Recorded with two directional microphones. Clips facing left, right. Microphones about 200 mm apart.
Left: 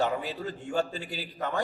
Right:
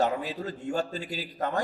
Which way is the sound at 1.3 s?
45° right (ahead or behind).